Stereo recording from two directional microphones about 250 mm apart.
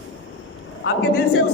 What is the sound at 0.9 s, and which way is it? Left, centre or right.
Speech, left.